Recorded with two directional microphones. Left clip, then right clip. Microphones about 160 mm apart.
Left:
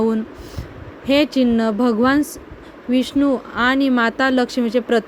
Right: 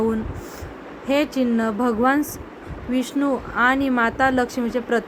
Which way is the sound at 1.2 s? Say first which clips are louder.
Left 5 dB; 55° left (ahead or behind).